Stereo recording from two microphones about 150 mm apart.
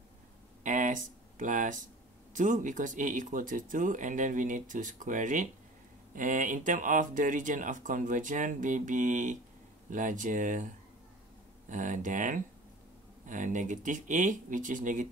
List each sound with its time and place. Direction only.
0.7 s a sound: 60° right (ahead or behind)
2.3 s speech: 55° right (ahead or behind)
11.7 s speech: 60° right (ahead or behind)